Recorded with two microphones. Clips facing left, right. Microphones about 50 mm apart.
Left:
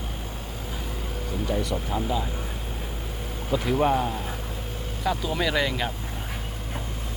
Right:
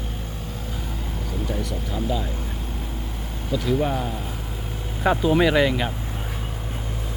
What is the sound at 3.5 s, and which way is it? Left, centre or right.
Speech, left.